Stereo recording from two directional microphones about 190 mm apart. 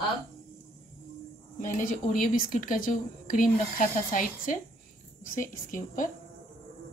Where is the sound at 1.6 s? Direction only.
45° left (ahead or behind).